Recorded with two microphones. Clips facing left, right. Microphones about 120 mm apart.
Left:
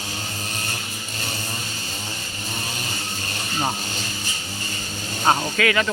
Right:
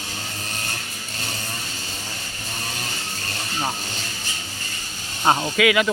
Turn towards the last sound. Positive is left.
turn(degrees=-10)  # may be behind; listen again after turning